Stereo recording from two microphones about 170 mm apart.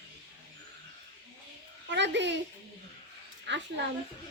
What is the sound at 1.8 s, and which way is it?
Speech, 90° right.